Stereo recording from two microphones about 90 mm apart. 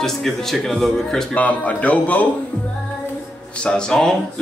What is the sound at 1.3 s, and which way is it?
Speech, 15° left (ahead or behind).